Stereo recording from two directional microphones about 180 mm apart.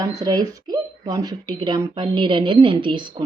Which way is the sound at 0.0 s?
20° right (ahead or behind).